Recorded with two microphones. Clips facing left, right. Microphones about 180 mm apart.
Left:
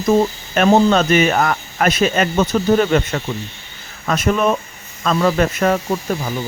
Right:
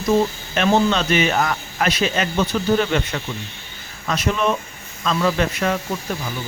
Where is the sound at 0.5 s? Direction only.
45° left (ahead or behind).